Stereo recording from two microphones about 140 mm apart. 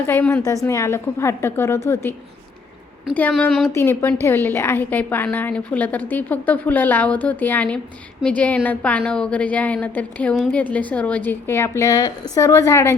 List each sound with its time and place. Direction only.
0.0 s a woman's voice: 15° left (ahead or behind)
3.2 s a woman's voice: 10° left (ahead or behind)
3.8 s a woman's voice: 15° left (ahead or behind)